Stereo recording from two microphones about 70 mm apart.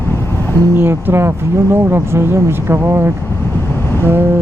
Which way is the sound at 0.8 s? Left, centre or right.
Right.